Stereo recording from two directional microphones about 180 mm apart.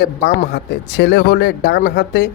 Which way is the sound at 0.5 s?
70° left (ahead or behind).